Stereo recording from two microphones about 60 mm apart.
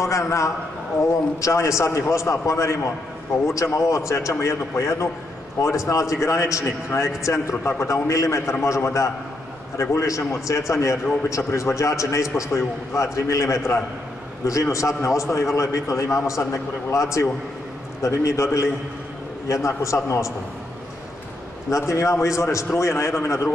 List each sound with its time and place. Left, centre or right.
0.0 s a man's voice: left
21.6 s a man's voice: left